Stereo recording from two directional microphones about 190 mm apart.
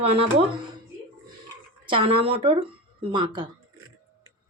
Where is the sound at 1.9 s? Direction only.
30° right (ahead or behind).